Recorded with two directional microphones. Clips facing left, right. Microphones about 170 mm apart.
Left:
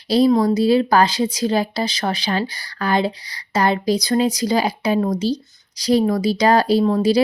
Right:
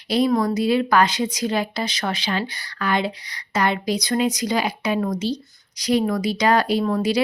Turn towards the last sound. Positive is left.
turn(degrees=30)  # may be behind; listen again after turning